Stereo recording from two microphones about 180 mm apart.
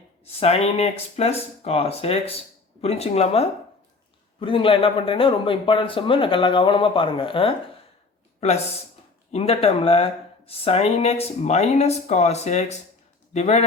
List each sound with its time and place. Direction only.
0.3 s a man's voice: 35° left (ahead or behind)